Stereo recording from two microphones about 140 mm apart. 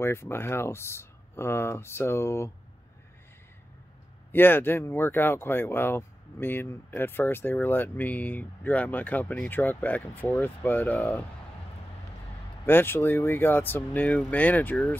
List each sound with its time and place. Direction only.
0.0 s speech: 20° left (ahead or behind)
4.3 s speech: 15° left (ahead or behind)
12.6 s speech: 15° left (ahead or behind)